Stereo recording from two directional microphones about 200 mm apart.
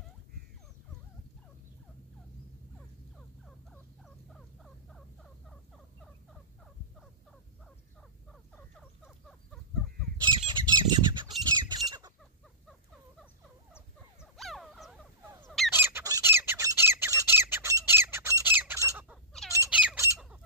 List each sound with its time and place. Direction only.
3.4 s fowl: centre (ahead or behind)
8.3 s frog: 5° left (ahead or behind)
10.2 s squawk: 20° right (ahead or behind)
14.2 s a sound: centre (ahead or behind)
15.7 s squawk: 10° right (ahead or behind)